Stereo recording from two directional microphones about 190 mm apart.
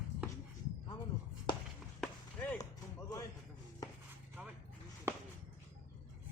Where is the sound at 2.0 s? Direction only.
10° left (ahead or behind).